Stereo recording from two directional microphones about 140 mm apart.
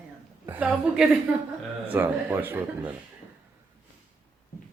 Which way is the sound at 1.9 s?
15° right (ahead or behind).